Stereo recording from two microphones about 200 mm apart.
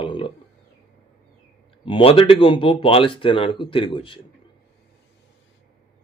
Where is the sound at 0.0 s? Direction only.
25° left (ahead or behind).